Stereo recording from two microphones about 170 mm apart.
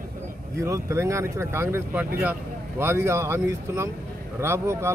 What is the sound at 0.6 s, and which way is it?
Speech, 20° right (ahead or behind).